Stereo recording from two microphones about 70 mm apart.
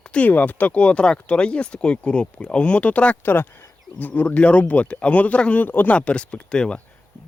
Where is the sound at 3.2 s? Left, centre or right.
Left; by 6.8 s centre.